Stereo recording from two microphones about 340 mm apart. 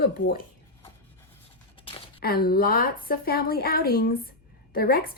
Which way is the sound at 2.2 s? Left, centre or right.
Left.